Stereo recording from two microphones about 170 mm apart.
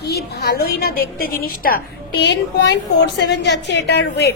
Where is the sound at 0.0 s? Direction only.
70° left (ahead or behind).